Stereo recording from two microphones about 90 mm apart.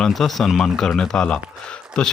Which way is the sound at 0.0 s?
Centre (ahead or behind).